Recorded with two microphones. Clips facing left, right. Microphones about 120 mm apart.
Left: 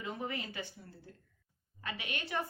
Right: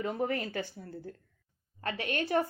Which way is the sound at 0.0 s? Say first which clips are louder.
Right 8 dB; 45° right (ahead or behind).